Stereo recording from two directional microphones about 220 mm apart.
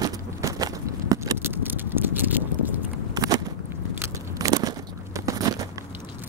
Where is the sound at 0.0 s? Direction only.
15° right (ahead or behind).